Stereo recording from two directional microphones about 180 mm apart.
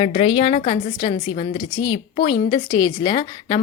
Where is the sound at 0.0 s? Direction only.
30° left (ahead or behind).